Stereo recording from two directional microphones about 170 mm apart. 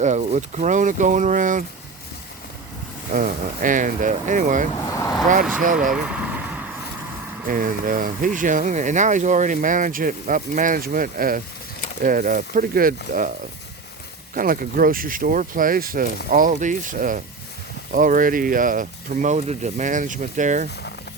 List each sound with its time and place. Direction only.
0.0 s speech: 45° right (ahead or behind)
3.2 s speech: 50° right (ahead or behind)
4.9 s vehicle: 20° left (ahead or behind)
5.5 s speech: 50° right (ahead or behind)
5.9 s vehicle: 5° right (ahead or behind)
7.4 s speech: 55° right (ahead or behind)
14.3 s speech: 55° right (ahead or behind)